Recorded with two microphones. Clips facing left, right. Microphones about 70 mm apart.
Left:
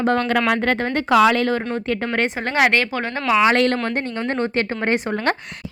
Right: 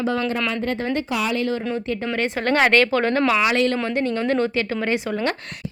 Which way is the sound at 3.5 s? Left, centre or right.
Left.